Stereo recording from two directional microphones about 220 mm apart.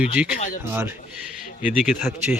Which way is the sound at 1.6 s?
Centre (ahead or behind).